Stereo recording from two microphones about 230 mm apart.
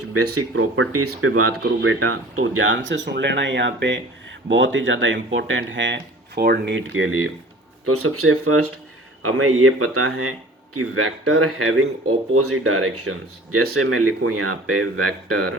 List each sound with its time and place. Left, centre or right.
0.3 s speech: right